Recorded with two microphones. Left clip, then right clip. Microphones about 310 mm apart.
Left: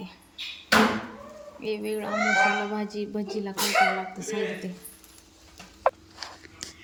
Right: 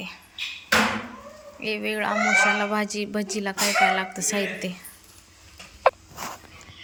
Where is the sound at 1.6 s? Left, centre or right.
Centre.